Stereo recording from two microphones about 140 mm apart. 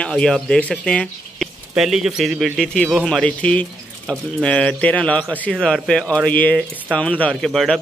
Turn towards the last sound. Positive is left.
turn(degrees=0)  # may be behind; listen again after turning